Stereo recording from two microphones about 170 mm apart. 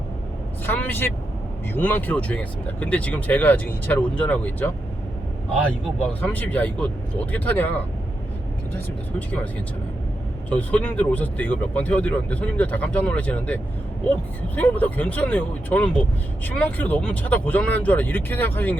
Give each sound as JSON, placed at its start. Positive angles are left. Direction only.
{"t": 0.6, "sound": "speech", "side_deg": 10}
{"t": 6.2, "sound": "speech", "side_deg": 10}
{"t": 9.1, "sound": "speech", "side_deg": 10}
{"t": 10.5, "sound": "speech", "side_deg": 10}